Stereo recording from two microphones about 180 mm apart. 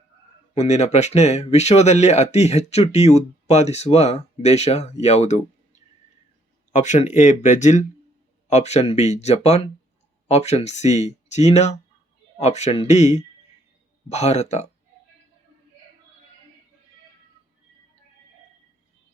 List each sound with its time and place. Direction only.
0.5 s speech: 40° left (ahead or behind)